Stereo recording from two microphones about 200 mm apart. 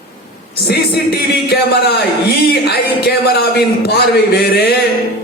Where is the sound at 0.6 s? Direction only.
55° left (ahead or behind).